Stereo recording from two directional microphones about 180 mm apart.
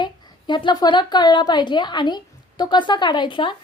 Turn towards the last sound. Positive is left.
turn(degrees=25)  # may be behind; listen again after turning